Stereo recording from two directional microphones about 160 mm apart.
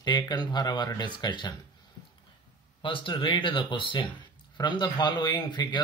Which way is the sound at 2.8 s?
30° left (ahead or behind).